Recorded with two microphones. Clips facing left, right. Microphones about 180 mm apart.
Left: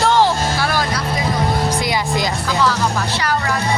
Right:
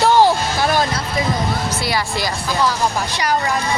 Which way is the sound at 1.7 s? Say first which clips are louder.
Left 2 dB; 15° left (ahead or behind).